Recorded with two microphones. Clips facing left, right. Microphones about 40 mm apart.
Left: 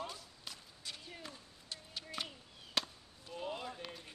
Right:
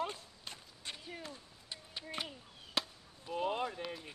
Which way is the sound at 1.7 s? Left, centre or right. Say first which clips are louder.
Right 1 dB; centre.